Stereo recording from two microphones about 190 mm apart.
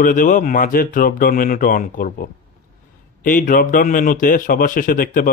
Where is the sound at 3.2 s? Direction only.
45° left (ahead or behind).